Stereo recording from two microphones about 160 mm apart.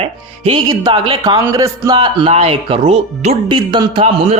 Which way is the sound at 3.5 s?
30° right (ahead or behind).